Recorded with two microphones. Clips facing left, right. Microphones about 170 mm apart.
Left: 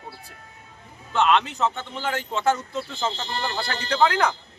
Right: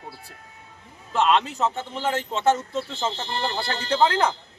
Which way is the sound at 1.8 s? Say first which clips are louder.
Right 2 dB; 30° right (ahead or behind).